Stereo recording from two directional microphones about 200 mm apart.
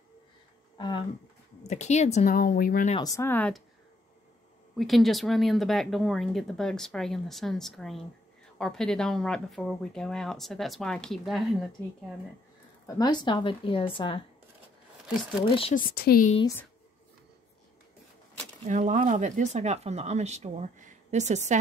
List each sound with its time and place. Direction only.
0.7 s speech: 20° left (ahead or behind)
1.6 s speech: 35° left (ahead or behind)
3.0 s speech: 15° left (ahead or behind)
4.7 s speech: centre (ahead or behind)
12.8 s a woman's voice: 20° left (ahead or behind)
15.7 s speech: 50° left (ahead or behind)
18.7 s speech: 40° right (ahead or behind)